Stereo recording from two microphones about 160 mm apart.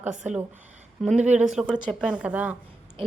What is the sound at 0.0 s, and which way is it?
A woman's voice, 5° right (ahead or behind).